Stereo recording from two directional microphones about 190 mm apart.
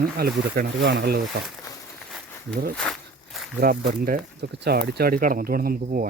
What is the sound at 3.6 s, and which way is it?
Speech, 50° right (ahead or behind).